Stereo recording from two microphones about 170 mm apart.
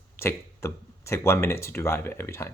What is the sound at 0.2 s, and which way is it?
Speech, 15° left (ahead or behind).